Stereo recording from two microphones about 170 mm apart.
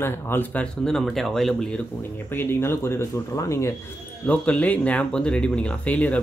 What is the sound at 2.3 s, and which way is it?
Speech, 15° left (ahead or behind).